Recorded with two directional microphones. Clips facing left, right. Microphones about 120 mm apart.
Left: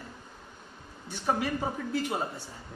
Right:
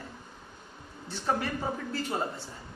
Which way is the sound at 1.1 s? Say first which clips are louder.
Left 1 dB; 15° left (ahead or behind).